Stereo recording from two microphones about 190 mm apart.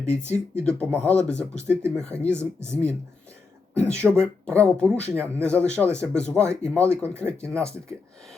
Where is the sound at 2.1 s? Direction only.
15° right (ahead or behind).